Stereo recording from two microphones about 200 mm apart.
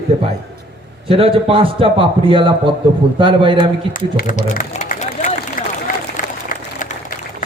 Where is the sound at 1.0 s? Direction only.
25° right (ahead or behind).